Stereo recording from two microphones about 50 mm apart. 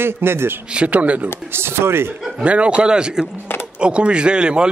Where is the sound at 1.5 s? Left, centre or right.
Right.